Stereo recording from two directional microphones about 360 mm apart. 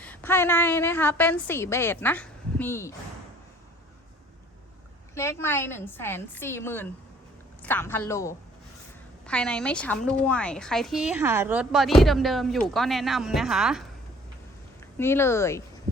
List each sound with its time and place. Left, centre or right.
0.0 s a woman's voice: centre
5.1 s a woman's voice: centre